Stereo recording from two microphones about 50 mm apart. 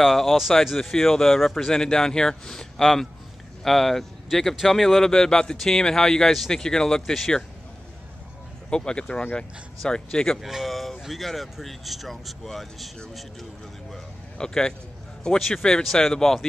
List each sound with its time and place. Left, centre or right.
0.0 s speech: centre
8.6 s speech: centre
10.4 s speech: centre
14.4 s speech: centre